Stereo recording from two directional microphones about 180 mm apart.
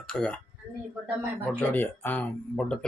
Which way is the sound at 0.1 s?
5° left (ahead or behind).